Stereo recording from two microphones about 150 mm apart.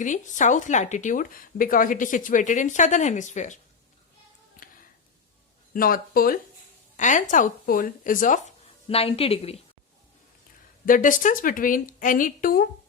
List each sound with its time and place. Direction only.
0.0 s speech: 55° left (ahead or behind)
4.6 s a sound: 70° left (ahead or behind)
5.7 s speech: 70° left (ahead or behind)
6.9 s speech: 55° left (ahead or behind)
8.9 s a woman's voice: 40° left (ahead or behind)
10.8 s speech: 60° left (ahead or behind)